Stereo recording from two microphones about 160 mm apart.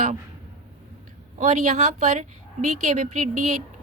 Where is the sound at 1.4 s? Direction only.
50° right (ahead or behind).